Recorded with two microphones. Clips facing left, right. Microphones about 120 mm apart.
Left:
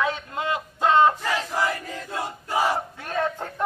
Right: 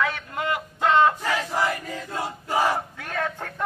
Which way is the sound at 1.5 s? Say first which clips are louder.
Right 1 dB; 15° right (ahead or behind).